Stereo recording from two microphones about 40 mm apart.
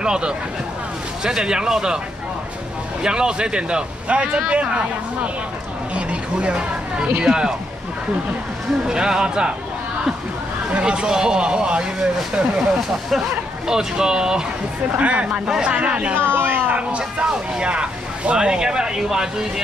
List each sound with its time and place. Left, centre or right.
0.0 s speech: right
3.0 s speech: centre
8.8 s speech: centre
10.7 s speech: right
12.5 s speech: centre
14.9 s speech: right
16.2 s a sound: right
16.7 s a sound: right
17.3 s speech: right